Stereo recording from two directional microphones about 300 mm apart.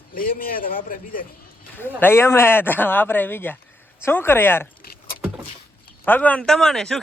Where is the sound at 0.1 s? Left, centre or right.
Left.